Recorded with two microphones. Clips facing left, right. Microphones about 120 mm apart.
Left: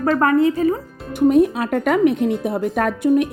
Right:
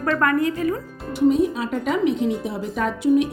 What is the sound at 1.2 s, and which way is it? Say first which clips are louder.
Speech: left 4 dB; 55° left (ahead or behind).